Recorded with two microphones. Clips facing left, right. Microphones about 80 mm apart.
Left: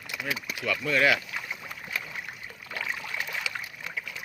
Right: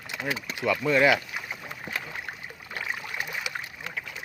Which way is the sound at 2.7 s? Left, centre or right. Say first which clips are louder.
Even; right.